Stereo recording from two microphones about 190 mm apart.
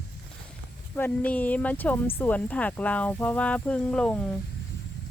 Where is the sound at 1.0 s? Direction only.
10° left (ahead or behind).